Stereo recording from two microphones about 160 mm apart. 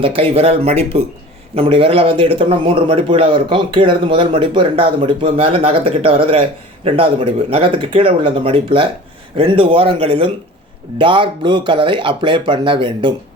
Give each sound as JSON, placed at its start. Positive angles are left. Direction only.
{"t": 0.0, "sound": "a man's voice", "side_deg": -35}